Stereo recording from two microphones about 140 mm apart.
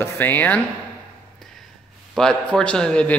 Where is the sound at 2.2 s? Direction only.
5° left (ahead or behind).